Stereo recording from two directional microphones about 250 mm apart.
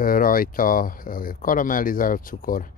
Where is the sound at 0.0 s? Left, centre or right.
Left.